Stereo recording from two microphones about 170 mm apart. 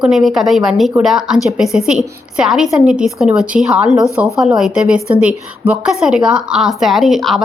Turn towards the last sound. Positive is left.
turn(degrees=0)  # may be behind; listen again after turning